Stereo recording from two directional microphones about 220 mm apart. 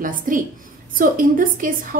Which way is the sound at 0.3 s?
40° right (ahead or behind).